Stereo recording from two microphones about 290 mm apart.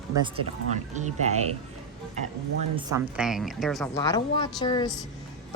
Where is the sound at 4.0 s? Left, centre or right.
Centre.